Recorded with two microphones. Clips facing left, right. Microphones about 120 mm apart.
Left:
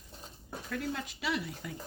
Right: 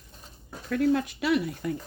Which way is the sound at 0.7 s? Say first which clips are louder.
Right 13 dB; 55° right (ahead or behind).